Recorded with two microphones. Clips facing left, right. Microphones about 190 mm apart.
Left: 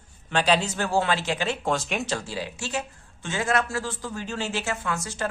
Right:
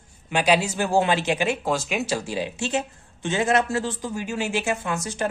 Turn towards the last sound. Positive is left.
turn(degrees=-20)  # may be behind; listen again after turning